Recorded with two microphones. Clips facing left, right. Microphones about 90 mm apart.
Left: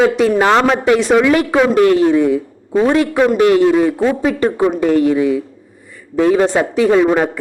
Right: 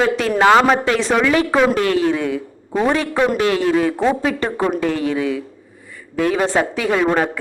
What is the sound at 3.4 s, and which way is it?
Speech, 20° left (ahead or behind).